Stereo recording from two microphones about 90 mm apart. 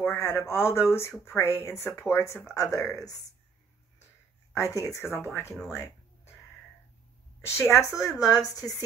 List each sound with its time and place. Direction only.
0.0 s speech: 25° left (ahead or behind)
2.8 s speech: 5° left (ahead or behind)
4.6 s speech: 35° left (ahead or behind)
5.5 s speech: 5° right (ahead or behind)
7.7 s speech: 35° left (ahead or behind)